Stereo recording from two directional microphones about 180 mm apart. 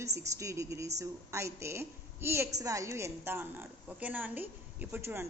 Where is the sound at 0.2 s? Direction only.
15° right (ahead or behind).